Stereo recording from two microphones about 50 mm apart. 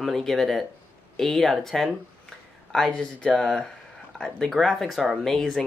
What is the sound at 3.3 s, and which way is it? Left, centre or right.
Speech, centre.